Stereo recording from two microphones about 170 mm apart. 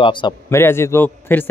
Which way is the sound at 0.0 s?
30° left (ahead or behind).